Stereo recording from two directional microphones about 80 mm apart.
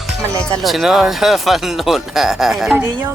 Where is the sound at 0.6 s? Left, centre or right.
Centre.